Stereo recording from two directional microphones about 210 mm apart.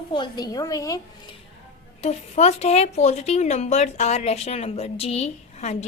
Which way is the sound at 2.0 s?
30° left (ahead or behind).